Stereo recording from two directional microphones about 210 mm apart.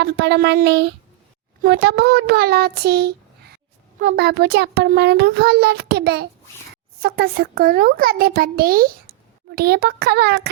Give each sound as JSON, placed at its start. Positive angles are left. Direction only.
{"t": 0.0, "sound": "a child's voice", "side_deg": -50}